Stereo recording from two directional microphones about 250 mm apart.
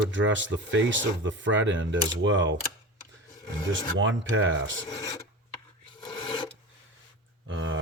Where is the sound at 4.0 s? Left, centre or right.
Right.